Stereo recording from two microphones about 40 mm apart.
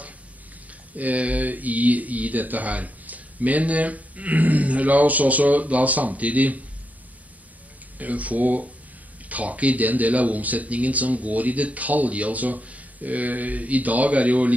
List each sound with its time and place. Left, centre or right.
0.9 s speech: right
8.0 s speech: right